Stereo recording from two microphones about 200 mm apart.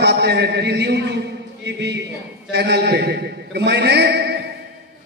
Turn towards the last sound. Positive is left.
turn(degrees=-55)  # may be behind; listen again after turning